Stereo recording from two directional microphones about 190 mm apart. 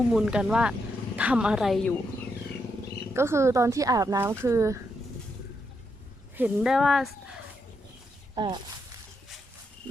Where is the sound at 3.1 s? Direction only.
15° right (ahead or behind).